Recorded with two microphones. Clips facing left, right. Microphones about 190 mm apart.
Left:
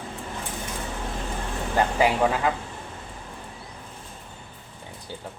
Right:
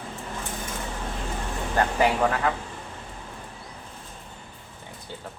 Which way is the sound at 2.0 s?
10° left (ahead or behind).